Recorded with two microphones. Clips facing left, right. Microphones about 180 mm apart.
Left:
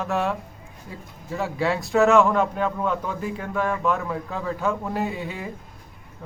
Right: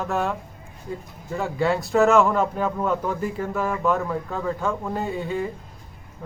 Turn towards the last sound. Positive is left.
turn(degrees=5)  # may be behind; listen again after turning